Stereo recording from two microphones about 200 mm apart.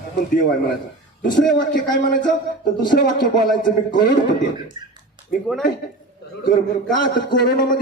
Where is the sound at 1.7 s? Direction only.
40° left (ahead or behind).